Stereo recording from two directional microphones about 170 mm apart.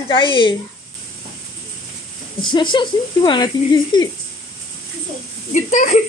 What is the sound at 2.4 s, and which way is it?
Speech, 30° left (ahead or behind).